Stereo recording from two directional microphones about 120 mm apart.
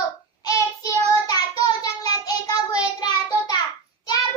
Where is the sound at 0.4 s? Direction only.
30° left (ahead or behind).